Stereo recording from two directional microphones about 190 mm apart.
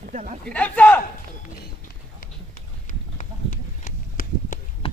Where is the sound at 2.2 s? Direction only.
45° left (ahead or behind).